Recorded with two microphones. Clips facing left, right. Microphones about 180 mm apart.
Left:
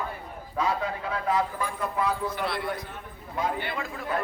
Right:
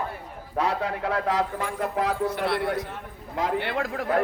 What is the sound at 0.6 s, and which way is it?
A man's voice, 65° right (ahead or behind).